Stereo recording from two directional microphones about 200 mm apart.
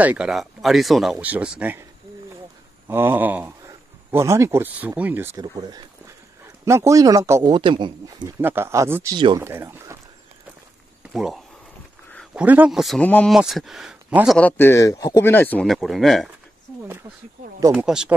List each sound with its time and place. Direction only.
0.0 s a man's voice: 5° right (ahead or behind)
2.9 s a man's voice: 10° right (ahead or behind)
8.2 s a man's voice: 10° right (ahead or behind)
11.1 s a man's voice: centre (ahead or behind)
14.6 s speech: 15° left (ahead or behind)
17.7 s a man's voice: 5° right (ahead or behind)